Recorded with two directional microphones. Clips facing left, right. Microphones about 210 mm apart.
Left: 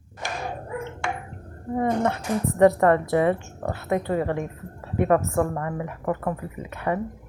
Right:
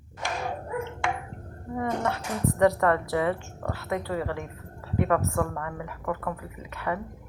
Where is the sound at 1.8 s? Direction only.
25° left (ahead or behind).